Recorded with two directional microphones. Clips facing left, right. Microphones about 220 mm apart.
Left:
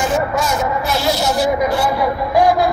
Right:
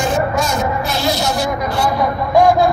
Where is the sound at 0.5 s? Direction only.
5° left (ahead or behind).